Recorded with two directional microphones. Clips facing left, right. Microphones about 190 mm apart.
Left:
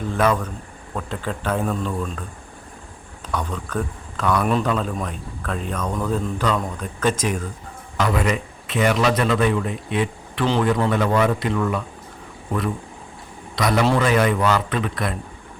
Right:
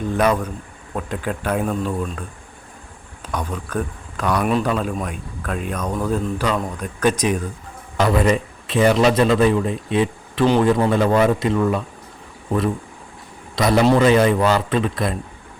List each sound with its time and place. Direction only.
0.1 s a man's voice: 15° right (ahead or behind)
3.3 s a man's voice: 10° right (ahead or behind)
7.9 s a man's voice: 35° right (ahead or behind)
13.6 s a man's voice: 25° right (ahead or behind)